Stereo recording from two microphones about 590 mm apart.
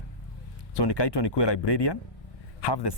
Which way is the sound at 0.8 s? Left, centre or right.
Left.